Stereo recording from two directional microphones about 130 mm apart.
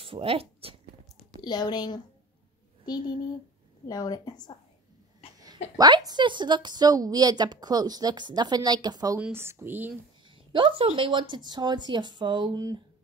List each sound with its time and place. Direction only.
0.0 s speech: 45° right (ahead or behind)
1.4 s a woman's voice: 35° left (ahead or behind)
5.8 s speech: 30° right (ahead or behind)
9.2 s speech: 20° right (ahead or behind)
10.2 s speech: 40° right (ahead or behind)